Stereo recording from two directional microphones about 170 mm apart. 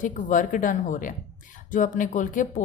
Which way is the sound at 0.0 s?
50° left (ahead or behind).